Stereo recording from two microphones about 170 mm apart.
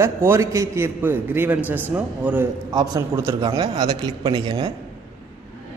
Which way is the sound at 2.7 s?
25° right (ahead or behind).